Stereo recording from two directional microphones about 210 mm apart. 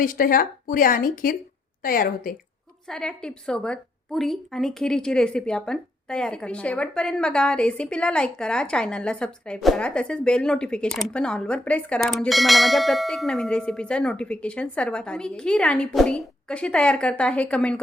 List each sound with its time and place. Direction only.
0.0 s a woman's voice: 40° left (ahead or behind)
2.8 s a woman's voice: 5° left (ahead or behind)